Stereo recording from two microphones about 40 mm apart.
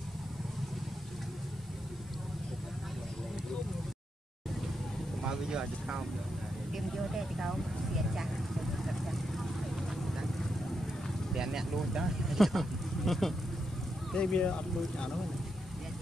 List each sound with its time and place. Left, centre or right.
5.2 s vehicle: centre
6.7 s vehicle: centre
11.3 s speech: centre
14.1 s speech: left